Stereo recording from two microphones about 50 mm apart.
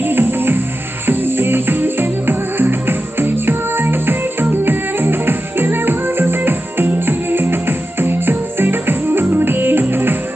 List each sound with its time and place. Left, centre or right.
0.0 s music: right